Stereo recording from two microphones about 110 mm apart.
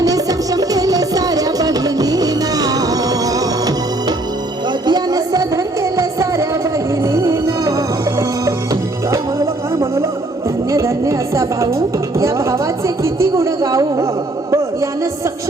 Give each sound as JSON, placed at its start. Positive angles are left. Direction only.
{"t": 0.0, "sound": "music", "side_deg": -35}
{"t": 4.9, "sound": "music", "side_deg": -40}
{"t": 10.7, "sound": "a sound", "side_deg": -30}